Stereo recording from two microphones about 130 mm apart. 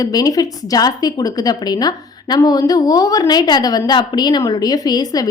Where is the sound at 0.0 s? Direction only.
30° left (ahead or behind).